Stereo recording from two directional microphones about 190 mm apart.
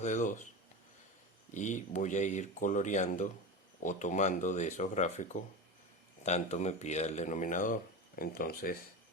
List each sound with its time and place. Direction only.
0.0 s speech: 40° left (ahead or behind)
1.5 s speech: 40° left (ahead or behind)